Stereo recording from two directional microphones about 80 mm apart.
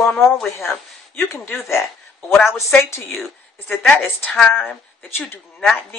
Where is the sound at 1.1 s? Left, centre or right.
Left.